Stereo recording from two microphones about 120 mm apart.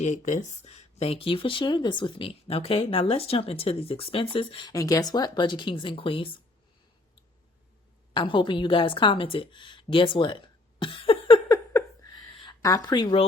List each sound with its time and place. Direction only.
0.0 s speech: 75° left (ahead or behind); by 4.7 s 45° left (ahead or behind)
4.7 s speech: 30° left (ahead or behind); by 6.2 s 45° left (ahead or behind)
8.1 s speech: 45° left (ahead or behind)
10.8 s a sound: 45° left (ahead or behind)
11.4 s a sound: 30° left (ahead or behind)
12.6 s speech: 30° left (ahead or behind)